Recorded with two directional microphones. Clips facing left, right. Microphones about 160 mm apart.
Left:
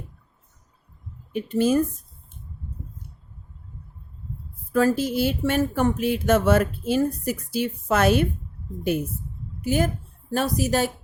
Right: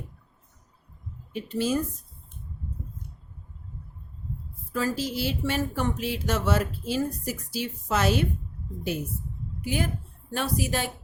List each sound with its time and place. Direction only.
1.3 s speech: 50° left (ahead or behind)
4.7 s speech: 50° left (ahead or behind)
9.6 s a woman's voice: 45° left (ahead or behind)